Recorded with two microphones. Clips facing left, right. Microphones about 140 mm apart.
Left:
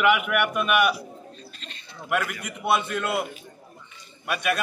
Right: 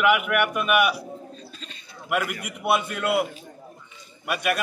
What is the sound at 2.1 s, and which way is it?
A man's voice, 10° right (ahead or behind).